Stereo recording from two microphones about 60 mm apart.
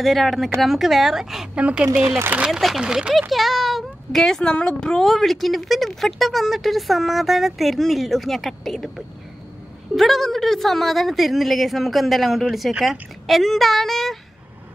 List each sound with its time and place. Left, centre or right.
0.0 s speech: centre
1.6 s speech: centre